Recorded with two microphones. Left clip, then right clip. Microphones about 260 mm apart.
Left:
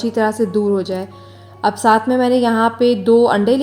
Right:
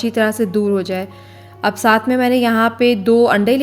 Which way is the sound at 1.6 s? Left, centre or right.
Right.